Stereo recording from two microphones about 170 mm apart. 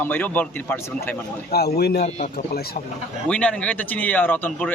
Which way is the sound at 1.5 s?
65° left (ahead or behind).